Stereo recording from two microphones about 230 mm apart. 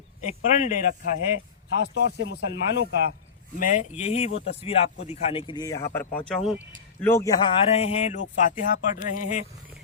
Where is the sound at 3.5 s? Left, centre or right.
Left; by 5.8 s centre.